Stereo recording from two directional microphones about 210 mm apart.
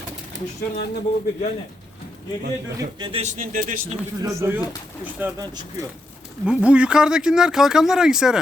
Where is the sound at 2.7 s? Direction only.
25° right (ahead or behind).